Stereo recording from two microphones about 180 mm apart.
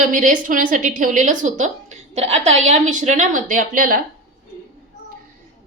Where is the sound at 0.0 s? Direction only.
45° right (ahead or behind).